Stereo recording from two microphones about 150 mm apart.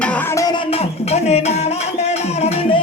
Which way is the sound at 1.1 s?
45° left (ahead or behind).